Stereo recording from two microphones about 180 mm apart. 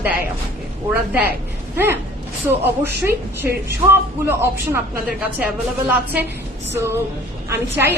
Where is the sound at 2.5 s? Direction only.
10° right (ahead or behind).